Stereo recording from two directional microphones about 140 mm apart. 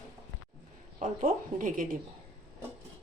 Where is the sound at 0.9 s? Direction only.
65° right (ahead or behind).